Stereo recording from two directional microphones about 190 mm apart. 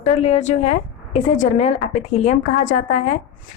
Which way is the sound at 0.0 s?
35° left (ahead or behind).